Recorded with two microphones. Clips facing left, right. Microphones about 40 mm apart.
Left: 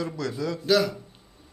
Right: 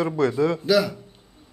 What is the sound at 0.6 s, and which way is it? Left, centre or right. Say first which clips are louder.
Speech: left 1 dB; centre.